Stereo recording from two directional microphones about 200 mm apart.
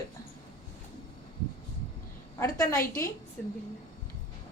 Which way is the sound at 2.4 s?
15° left (ahead or behind).